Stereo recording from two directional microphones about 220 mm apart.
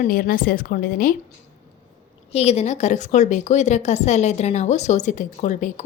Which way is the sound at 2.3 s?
30° left (ahead or behind).